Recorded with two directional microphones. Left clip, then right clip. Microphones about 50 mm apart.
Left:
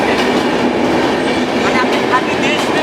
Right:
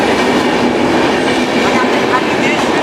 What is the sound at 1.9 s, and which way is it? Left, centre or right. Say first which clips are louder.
Train: right 1 dB; left.